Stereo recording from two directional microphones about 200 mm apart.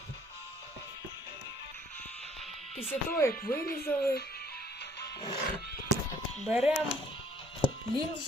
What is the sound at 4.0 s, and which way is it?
Speech, 50° left (ahead or behind).